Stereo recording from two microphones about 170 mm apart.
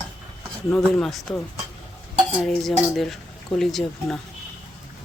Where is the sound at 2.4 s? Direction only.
Centre (ahead or behind).